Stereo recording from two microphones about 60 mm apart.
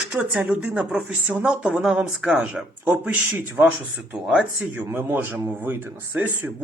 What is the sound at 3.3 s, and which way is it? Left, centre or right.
Speech, right.